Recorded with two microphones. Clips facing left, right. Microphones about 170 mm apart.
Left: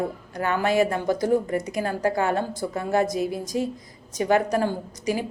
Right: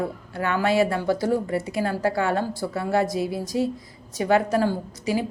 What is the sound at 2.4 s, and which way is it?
A woman's voice, 20° left (ahead or behind).